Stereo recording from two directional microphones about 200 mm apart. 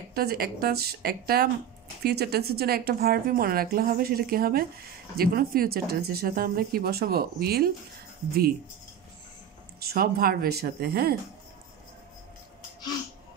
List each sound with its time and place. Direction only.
0.1 s a woman's voice: 50° right (ahead or behind)
9.8 s a woman's voice: 50° right (ahead or behind)